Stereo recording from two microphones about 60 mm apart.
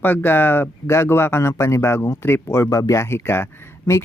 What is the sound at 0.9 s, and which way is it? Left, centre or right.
Speech, left.